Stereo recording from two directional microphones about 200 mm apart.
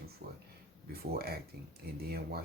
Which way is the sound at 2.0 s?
50° right (ahead or behind).